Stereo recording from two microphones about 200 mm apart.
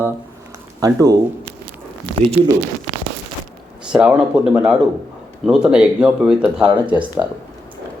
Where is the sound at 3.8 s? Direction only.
5° right (ahead or behind).